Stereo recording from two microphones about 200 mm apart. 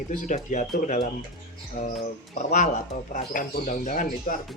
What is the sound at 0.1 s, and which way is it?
Speech, 40° left (ahead or behind).